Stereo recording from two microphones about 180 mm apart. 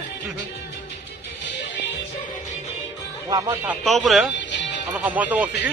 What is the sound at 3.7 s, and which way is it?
Speech, centre (ahead or behind).